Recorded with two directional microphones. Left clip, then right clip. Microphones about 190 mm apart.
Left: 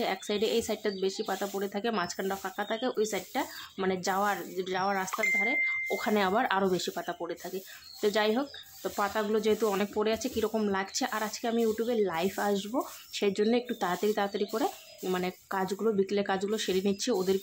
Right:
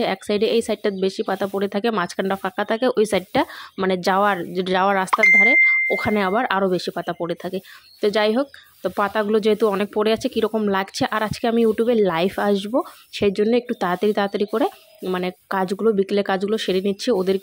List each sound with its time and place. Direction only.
0.0 s speech: 35° right (ahead or behind)